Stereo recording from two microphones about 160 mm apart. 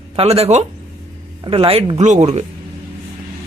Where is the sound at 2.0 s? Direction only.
45° right (ahead or behind).